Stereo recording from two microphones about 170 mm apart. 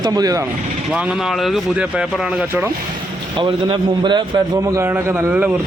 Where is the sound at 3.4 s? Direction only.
30° right (ahead or behind).